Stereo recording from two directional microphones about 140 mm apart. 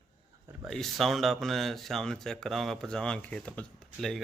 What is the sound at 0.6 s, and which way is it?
Speech, centre (ahead or behind).